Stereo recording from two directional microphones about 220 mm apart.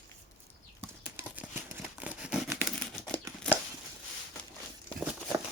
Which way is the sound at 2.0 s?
5° right (ahead or behind).